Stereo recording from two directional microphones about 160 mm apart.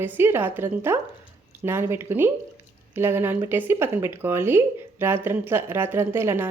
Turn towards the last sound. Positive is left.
turn(degrees=-15)  # may be behind; listen again after turning